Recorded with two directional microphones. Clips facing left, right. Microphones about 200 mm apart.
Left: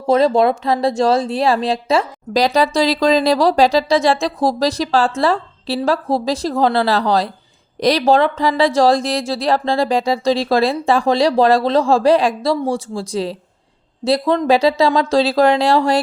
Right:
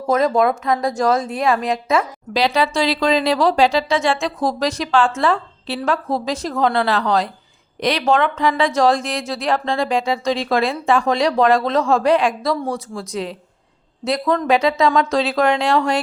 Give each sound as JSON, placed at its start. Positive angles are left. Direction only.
{"t": 0.1, "sound": "speech", "side_deg": 30}